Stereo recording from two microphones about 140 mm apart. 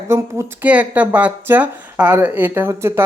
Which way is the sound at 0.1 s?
15° right (ahead or behind).